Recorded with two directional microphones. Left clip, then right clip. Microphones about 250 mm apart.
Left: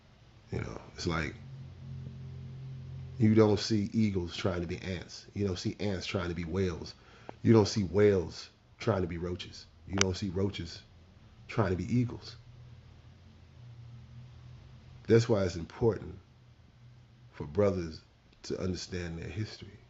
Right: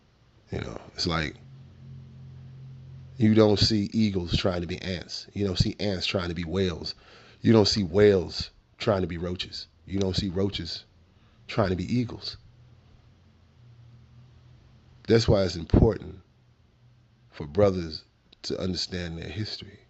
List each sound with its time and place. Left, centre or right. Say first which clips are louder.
0.5 s a sound: right 6 dB; right
3.2 s speech: right 5 dB; right
15.0 s speech: right 4 dB; right
17.3 s speech: right 6 dB; right